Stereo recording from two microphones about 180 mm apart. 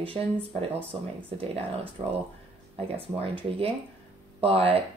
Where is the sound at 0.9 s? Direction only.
30° right (ahead or behind).